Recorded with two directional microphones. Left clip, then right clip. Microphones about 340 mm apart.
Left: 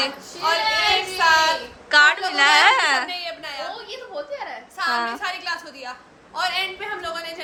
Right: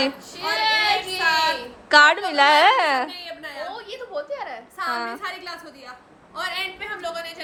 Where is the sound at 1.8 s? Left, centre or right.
Centre.